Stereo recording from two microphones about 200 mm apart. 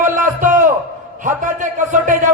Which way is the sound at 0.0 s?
40° right (ahead or behind).